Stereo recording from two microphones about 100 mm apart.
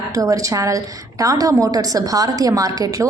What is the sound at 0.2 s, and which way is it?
A woman's voice, 35° right (ahead or behind).